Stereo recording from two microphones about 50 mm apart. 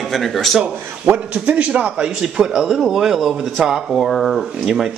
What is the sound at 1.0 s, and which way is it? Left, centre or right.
Speech, right.